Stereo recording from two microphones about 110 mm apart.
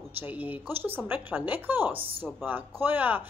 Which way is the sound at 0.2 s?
15° right (ahead or behind).